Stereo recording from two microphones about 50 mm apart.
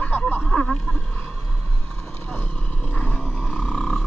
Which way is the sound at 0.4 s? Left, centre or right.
Centre.